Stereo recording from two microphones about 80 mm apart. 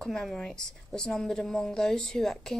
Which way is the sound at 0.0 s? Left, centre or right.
Centre.